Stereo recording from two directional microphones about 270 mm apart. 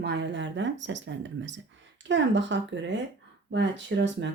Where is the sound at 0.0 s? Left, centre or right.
Right.